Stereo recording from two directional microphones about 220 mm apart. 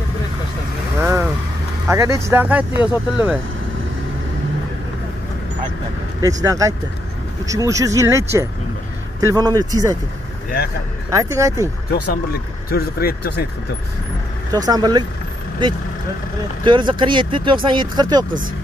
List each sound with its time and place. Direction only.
0.9 s vehicle: 10° right (ahead or behind)
1.9 s speech: 15° right (ahead or behind)
6.2 s speech: 15° right (ahead or behind)
11.1 s speech: 15° right (ahead or behind)
12.7 s speech: 45° left (ahead or behind)
14.5 s speech: 15° right (ahead or behind)
16.6 s speech: 20° right (ahead or behind)